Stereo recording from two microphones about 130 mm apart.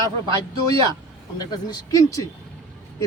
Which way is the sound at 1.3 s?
30° left (ahead or behind).